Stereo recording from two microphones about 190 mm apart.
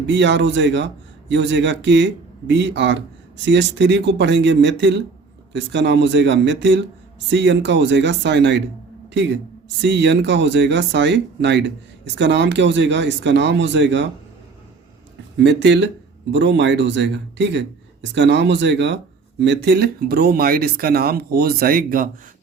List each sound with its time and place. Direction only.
0.1 s speech: 70° right (ahead or behind)
15.4 s speech: 65° right (ahead or behind); by 22.1 s 50° right (ahead or behind)